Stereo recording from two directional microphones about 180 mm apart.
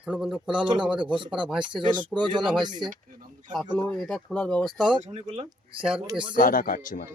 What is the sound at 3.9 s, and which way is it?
Speech, 5° left (ahead or behind).